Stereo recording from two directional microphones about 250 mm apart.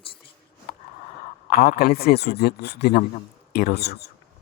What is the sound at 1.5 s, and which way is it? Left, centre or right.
A man's voice, left.